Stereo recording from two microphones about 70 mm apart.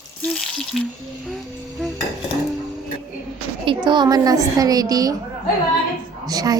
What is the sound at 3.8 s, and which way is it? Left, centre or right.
A woman's voice, right.